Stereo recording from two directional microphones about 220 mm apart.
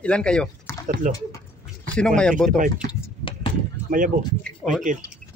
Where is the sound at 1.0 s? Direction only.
35° right (ahead or behind).